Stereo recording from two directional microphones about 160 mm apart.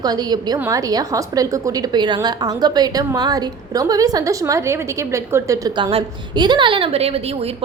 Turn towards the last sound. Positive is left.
turn(degrees=-40)  # may be behind; listen again after turning